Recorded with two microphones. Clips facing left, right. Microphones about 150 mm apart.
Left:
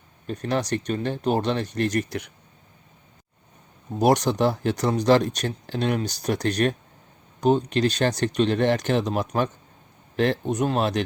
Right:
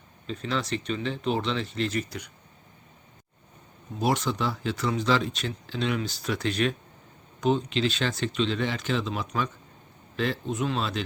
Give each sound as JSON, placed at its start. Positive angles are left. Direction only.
{"t": 0.3, "sound": "speech", "side_deg": 50}
{"t": 3.9, "sound": "speech", "side_deg": 45}
{"t": 10.5, "sound": "speech", "side_deg": 45}